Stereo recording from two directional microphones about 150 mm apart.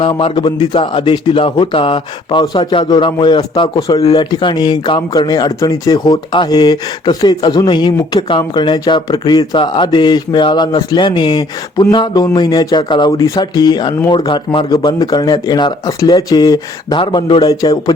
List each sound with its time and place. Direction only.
0.0 s speech: 35° left (ahead or behind)